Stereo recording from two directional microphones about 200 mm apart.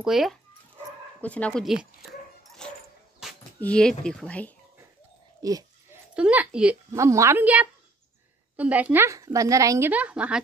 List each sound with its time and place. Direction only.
0.0 s speech: centre (ahead or behind)
2.6 s dog: 5° left (ahead or behind)
3.2 s a sound: 5° right (ahead or behind)
3.6 s speech: 5° left (ahead or behind)
5.4 s a sound: 15° right (ahead or behind)
6.1 s a woman's voice: 5° right (ahead or behind)